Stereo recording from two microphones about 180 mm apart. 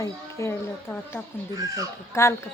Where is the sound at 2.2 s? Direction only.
15° left (ahead or behind).